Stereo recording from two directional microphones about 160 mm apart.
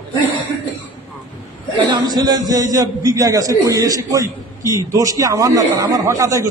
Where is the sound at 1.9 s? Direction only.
25° right (ahead or behind).